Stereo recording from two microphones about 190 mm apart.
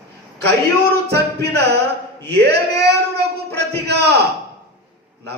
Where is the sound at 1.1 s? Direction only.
60° right (ahead or behind).